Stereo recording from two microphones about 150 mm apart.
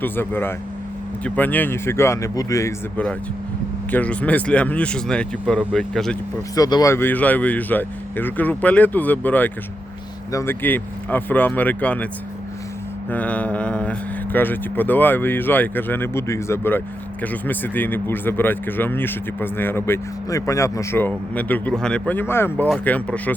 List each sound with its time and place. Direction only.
0.0 s speech: 15° left (ahead or behind)
3.9 s speech: 10° left (ahead or behind)
6.6 s speech: 25° left (ahead or behind); by 12.0 s 10° left (ahead or behind)
13.1 s speech: 10° left (ahead or behind)